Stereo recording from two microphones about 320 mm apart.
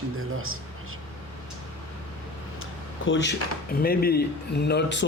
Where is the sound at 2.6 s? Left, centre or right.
Left.